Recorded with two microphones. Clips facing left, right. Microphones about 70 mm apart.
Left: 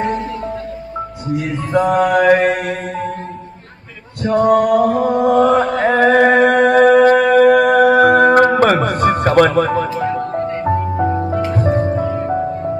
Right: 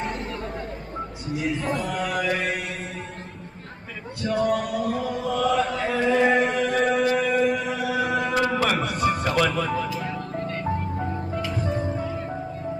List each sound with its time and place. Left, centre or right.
1.4 s a sound: centre
1.7 s music: left
4.2 s chant: left
10.0 s music: left
11.5 s music: left